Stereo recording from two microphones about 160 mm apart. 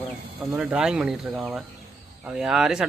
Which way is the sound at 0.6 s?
5° right (ahead or behind).